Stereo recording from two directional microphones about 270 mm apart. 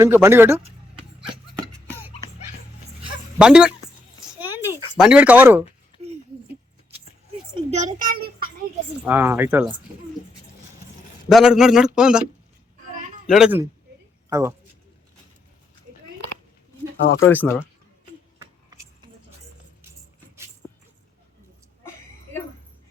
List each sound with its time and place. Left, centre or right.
0.0 s speech: centre
3.3 s speech: centre
4.2 s a sound: centre
4.9 s speech: centre
7.5 s a child's voice: right
9.0 s speech: centre
11.3 s speech: centre
13.3 s speech: centre
17.2 s speech: centre